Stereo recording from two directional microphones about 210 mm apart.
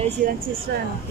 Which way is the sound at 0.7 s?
45° right (ahead or behind).